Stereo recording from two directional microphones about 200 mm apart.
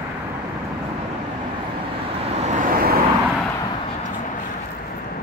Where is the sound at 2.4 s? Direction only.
45° right (ahead or behind).